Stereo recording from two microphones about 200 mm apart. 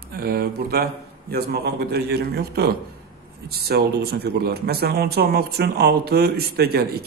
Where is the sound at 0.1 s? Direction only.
50° right (ahead or behind).